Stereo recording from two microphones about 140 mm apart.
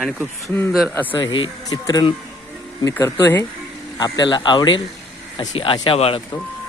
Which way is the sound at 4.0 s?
30° left (ahead or behind).